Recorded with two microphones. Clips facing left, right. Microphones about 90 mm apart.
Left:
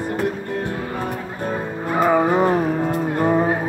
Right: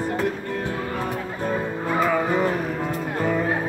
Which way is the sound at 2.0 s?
35° left (ahead or behind).